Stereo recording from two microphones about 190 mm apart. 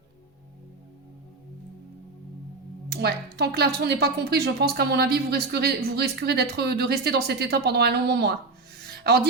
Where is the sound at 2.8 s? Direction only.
55° right (ahead or behind).